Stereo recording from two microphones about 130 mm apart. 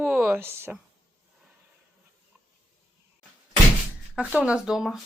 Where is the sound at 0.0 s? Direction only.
15° right (ahead or behind).